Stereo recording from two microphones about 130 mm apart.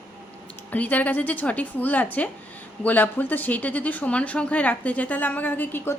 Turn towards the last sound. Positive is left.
turn(degrees=15)  # may be behind; listen again after turning